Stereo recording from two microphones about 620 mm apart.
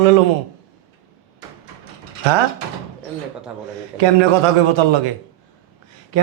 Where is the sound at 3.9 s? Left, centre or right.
Right.